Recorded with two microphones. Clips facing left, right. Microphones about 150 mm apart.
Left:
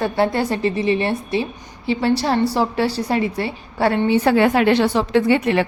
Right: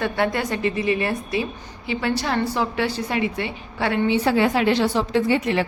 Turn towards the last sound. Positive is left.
turn(degrees=65)  # may be behind; listen again after turning